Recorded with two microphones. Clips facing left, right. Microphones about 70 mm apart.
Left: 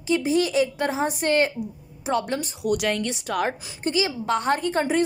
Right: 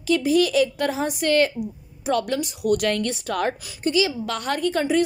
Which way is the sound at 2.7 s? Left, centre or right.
Centre.